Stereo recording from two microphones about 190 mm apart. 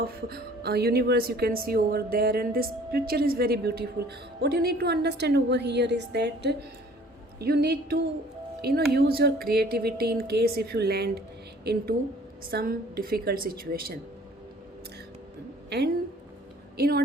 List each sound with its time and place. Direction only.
0.3 s a woman's voice: 55° right (ahead or behind)
16.7 s speech: 55° right (ahead or behind)